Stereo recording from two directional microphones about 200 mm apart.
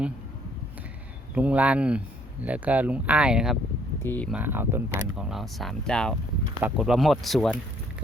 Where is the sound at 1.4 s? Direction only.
5° right (ahead or behind).